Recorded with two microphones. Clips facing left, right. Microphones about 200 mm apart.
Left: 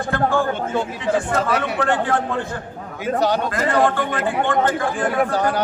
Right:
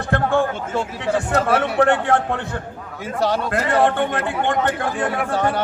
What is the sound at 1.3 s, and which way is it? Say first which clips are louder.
A man's voice: right 2 dB; 60° right (ahead or behind).